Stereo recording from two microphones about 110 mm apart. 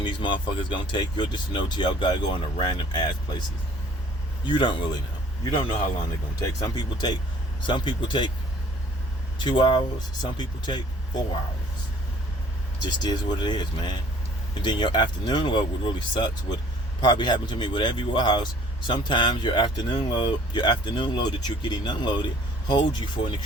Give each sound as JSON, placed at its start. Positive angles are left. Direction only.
{"t": 0.0, "sound": "speech", "side_deg": 45}
{"t": 4.4, "sound": "speech", "side_deg": 45}
{"t": 6.4, "sound": "speech", "side_deg": 40}
{"t": 9.4, "sound": "speech", "side_deg": 45}
{"t": 12.8, "sound": "speech", "side_deg": 40}